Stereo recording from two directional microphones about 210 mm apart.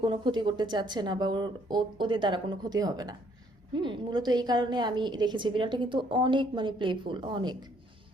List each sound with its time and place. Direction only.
0.0 s a woman's voice: 20° right (ahead or behind)